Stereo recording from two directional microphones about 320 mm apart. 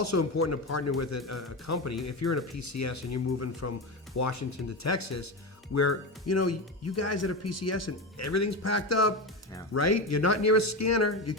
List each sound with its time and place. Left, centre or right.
0.0 s speech: left